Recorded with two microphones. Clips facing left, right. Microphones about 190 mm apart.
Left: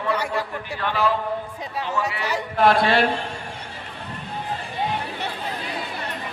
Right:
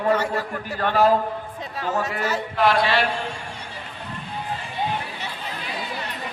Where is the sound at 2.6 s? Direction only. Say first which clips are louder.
Left 2 dB; 50° left (ahead or behind).